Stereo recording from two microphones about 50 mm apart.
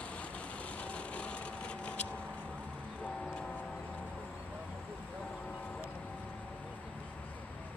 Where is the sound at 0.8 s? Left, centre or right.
Left.